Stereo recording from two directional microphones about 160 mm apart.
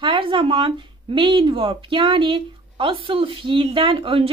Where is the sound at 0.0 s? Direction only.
30° right (ahead or behind).